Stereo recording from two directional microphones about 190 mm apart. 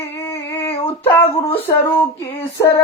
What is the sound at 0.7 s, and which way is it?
Female singing, 30° left (ahead or behind).